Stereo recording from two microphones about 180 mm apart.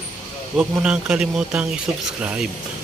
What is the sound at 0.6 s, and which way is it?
A man's voice, 5° right (ahead or behind).